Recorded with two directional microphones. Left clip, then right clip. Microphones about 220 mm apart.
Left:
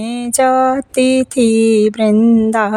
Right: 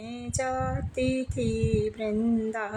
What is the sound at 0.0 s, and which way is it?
Mantra, 50° left (ahead or behind).